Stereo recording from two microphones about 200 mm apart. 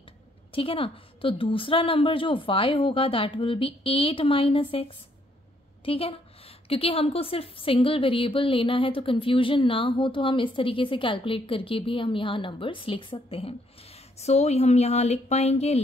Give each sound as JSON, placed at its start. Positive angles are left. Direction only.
{"t": 0.5, "sound": "a woman's voice", "side_deg": 25}